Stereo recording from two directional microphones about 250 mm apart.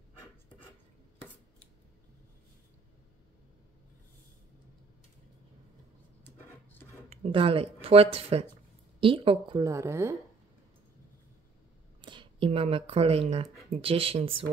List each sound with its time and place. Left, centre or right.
7.1 s a woman's voice: right
12.0 s speech: centre